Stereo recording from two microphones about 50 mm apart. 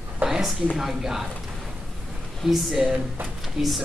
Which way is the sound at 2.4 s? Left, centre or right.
Centre.